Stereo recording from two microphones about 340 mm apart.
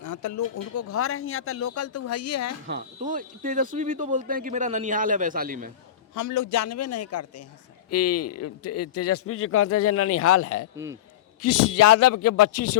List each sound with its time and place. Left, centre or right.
0.0 s speech: left
2.6 s speech: right
6.1 s a man's voice: left